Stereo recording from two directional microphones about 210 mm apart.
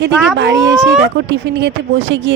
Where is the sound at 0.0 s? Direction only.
55° right (ahead or behind).